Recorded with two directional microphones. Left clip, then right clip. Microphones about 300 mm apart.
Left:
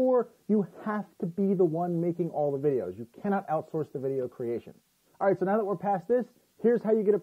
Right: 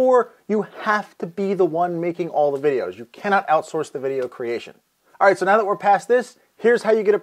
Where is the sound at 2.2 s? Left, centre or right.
Right.